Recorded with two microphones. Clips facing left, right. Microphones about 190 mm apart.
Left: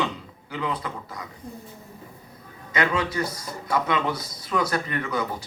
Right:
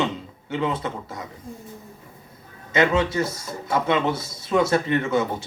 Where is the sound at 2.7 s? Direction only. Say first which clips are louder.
Right 5 dB; 25° right (ahead or behind).